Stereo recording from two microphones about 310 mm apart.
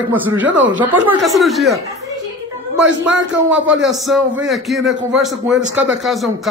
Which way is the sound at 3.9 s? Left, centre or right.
Centre.